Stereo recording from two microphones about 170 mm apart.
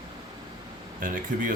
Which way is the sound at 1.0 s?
55° right (ahead or behind).